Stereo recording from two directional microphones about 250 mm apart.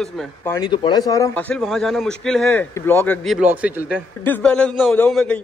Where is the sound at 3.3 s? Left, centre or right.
Centre.